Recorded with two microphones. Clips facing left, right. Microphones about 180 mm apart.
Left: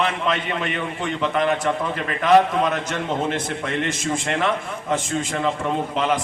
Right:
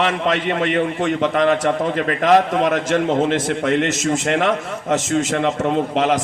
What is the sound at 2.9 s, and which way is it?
Speech, 45° right (ahead or behind).